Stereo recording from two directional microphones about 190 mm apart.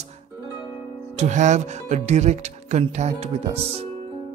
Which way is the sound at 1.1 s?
35° right (ahead or behind).